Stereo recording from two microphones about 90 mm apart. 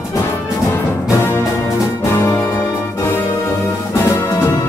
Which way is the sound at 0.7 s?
25° left (ahead or behind).